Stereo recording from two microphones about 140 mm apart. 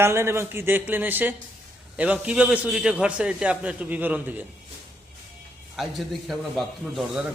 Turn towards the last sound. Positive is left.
turn(degrees=0)  # may be behind; listen again after turning